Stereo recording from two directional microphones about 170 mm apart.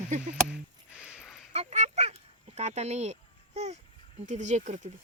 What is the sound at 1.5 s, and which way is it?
Dog, 40° right (ahead or behind).